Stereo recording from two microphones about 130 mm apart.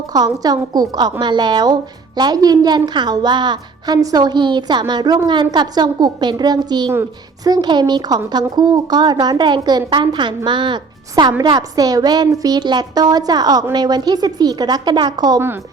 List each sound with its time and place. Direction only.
0.1 s a woman's voice: 30° right (ahead or behind)